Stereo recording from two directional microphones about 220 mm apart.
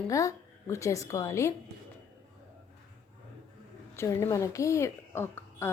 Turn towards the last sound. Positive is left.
turn(degrees=10)  # may be behind; listen again after turning